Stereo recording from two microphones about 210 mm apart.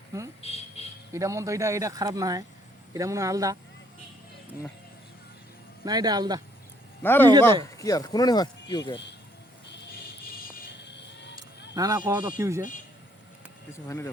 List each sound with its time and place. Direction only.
0.4 s a sound: 30° left (ahead or behind)
1.1 s speech: 15° right (ahead or behind)
5.8 s speech: 20° right (ahead or behind)
7.0 s speech: 10° left (ahead or behind)
10.8 s vehicle: 55° left (ahead or behind)
11.7 s speech: 15° right (ahead or behind)
13.7 s speech: 15° left (ahead or behind)